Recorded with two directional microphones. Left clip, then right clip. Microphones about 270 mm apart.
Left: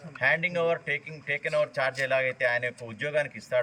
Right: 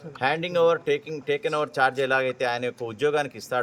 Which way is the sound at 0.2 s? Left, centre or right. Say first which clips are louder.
Right 3 dB; centre.